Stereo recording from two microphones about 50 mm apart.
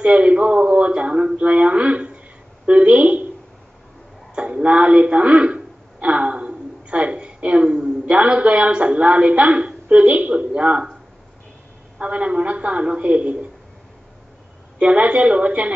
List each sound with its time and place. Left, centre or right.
0.0 s speech: right
4.4 s a woman's voice: right
12.0 s speech: right
14.8 s speech: right